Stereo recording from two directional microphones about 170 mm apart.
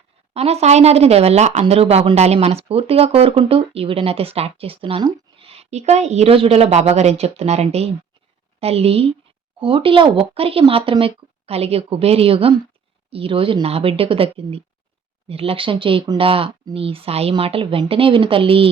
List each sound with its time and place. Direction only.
0.3 s speech: 40° right (ahead or behind)